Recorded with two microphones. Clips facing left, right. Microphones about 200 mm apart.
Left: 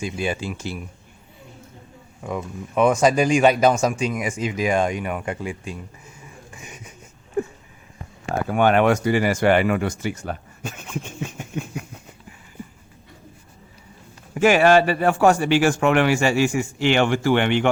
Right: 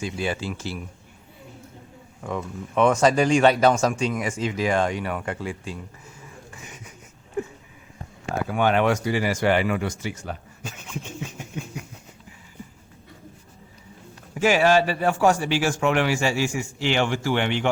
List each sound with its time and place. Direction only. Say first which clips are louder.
0.0 s speech: left 2 dB; 15° left (ahead or behind)
2.2 s speech: left 1 dB; 10° left (ahead or behind)
6.5 s a sound: left 2 dB; 15° left (ahead or behind)
8.4 s speech: left 4 dB; 55° left (ahead or behind)
14.3 s a man's voice: left 4 dB; 55° left (ahead or behind)